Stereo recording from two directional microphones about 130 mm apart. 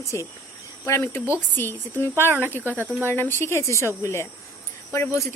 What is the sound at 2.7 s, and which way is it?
Speech, 15° right (ahead or behind).